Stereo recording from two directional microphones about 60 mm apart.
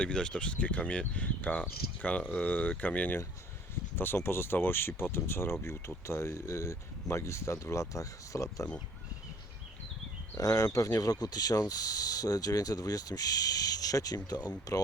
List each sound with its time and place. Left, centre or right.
0.0 s speech: centre
3.9 s speech: left
10.3 s speech: left